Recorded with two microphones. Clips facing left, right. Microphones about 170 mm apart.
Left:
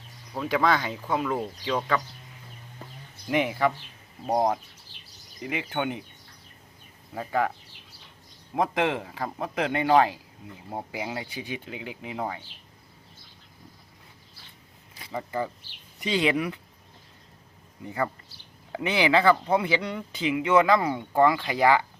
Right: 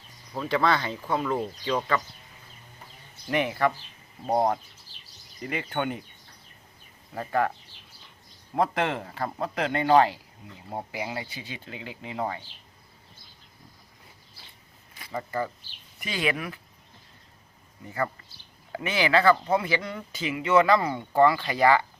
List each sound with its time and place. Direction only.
0.3 s speech: 10° left (ahead or behind)
3.2 s speech: 15° left (ahead or behind)
5.4 s speech: 10° left (ahead or behind)
7.1 s speech: 5° left (ahead or behind)
8.5 s speech: 10° left (ahead or behind)
12.1 s speech: centre (ahead or behind)
15.1 s speech: 15° left (ahead or behind)
17.8 s speech: 15° left (ahead or behind)